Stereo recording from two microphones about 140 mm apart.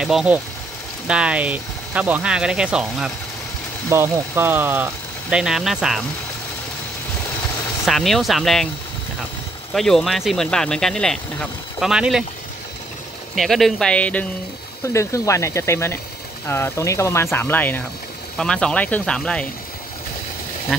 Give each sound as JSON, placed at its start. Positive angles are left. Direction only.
{"t": 0.0, "sound": "speech", "side_deg": -5}
{"t": 3.9, "sound": "speech", "side_deg": -15}
{"t": 7.8, "sound": "speech", "side_deg": 0}
{"t": 9.8, "sound": "speech", "side_deg": 0}
{"t": 13.3, "sound": "speech", "side_deg": 0}
{"t": 14.9, "sound": "speech", "side_deg": 20}